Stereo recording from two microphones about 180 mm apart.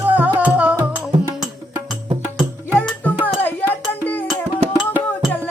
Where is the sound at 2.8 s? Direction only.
10° left (ahead or behind).